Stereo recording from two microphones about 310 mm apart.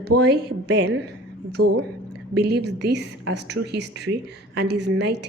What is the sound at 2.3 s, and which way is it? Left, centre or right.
A woman's voice, right.